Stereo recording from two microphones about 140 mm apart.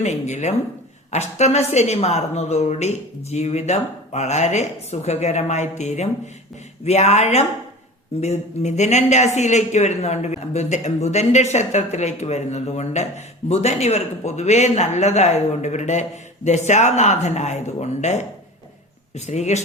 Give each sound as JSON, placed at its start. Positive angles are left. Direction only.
{"t": 0.0, "sound": "speech", "side_deg": 55}